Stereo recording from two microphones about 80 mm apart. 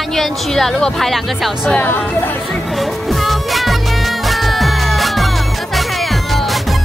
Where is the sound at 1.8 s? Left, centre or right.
Left.